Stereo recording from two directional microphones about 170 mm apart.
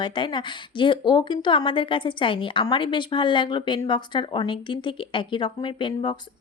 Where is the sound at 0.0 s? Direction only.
30° left (ahead or behind).